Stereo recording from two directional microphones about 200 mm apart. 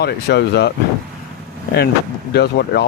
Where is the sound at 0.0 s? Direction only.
55° left (ahead or behind).